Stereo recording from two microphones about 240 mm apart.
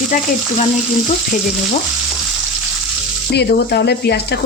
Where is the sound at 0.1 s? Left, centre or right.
Left.